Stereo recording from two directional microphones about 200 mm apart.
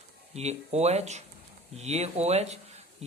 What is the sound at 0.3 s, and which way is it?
Speech, 35° right (ahead or behind).